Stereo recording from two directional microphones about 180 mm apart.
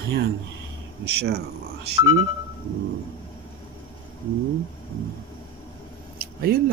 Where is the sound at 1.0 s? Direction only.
65° right (ahead or behind).